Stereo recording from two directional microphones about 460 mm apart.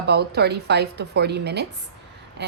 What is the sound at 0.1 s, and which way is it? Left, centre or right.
A woman's voice, right.